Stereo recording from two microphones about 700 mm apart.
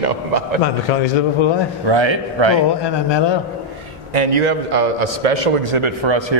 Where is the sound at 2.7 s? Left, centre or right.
Left.